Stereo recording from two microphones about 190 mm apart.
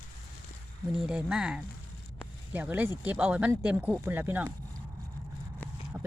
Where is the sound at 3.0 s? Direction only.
10° right (ahead or behind).